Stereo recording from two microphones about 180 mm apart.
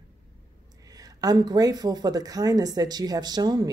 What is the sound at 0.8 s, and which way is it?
Speech, 20° right (ahead or behind).